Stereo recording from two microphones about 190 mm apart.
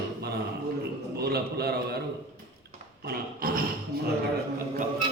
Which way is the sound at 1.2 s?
55° right (ahead or behind).